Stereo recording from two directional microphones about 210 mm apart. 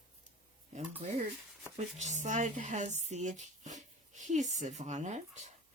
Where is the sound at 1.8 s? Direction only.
35° right (ahead or behind).